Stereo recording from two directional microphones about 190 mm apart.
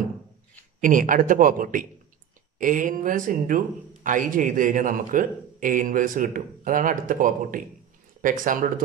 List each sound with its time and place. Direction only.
0.7 s speech: 45° right (ahead or behind)